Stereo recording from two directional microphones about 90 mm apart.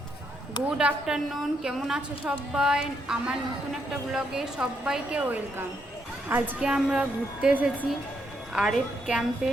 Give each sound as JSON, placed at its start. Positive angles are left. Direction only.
{"t": 0.8, "sound": "a woman's voice", "side_deg": -10}